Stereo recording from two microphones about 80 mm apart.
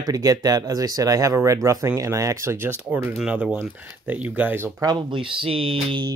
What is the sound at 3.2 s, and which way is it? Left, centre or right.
Speech, centre.